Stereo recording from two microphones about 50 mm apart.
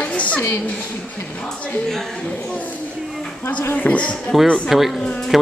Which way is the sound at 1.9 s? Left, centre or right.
Centre.